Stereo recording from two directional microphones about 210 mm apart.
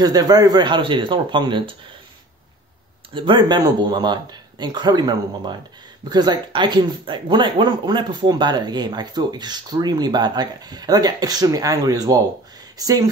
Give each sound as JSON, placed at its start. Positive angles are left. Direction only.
{"t": 0.0, "sound": "speech", "side_deg": -20}
{"t": 3.2, "sound": "speech", "side_deg": -25}